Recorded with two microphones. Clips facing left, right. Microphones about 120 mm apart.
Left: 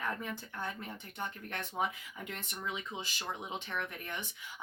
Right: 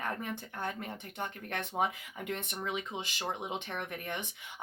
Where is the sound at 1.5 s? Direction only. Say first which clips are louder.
Right 4 dB; 55° right (ahead or behind).